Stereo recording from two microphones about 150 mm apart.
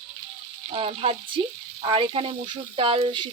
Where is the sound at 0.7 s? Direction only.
40° right (ahead or behind).